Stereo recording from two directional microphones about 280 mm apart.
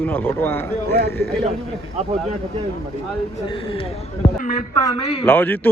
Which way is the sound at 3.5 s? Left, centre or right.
Centre.